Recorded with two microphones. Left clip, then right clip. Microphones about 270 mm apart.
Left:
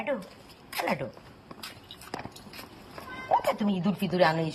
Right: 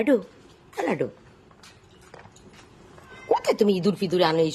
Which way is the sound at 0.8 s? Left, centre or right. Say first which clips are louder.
Right 4 dB; centre.